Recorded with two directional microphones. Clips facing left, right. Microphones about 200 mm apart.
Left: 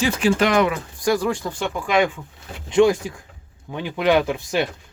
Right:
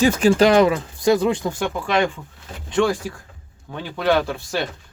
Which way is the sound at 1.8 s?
10° left (ahead or behind).